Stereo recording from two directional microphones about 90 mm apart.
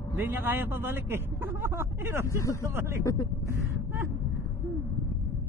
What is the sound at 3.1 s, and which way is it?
Speech, 35° left (ahead or behind).